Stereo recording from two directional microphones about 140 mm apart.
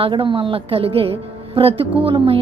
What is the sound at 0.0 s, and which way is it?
A woman's voice, 35° right (ahead or behind).